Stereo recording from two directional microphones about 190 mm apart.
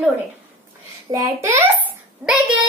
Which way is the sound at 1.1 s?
15° right (ahead or behind).